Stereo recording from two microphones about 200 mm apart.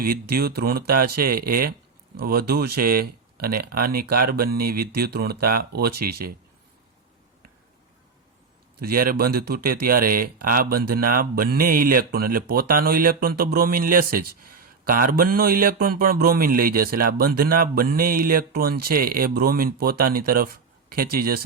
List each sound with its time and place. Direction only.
0.0 s speech: 50° right (ahead or behind)
8.8 s speech: 45° right (ahead or behind)